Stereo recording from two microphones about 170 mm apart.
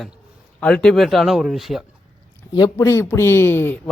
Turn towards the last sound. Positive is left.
turn(degrees=15)  # may be behind; listen again after turning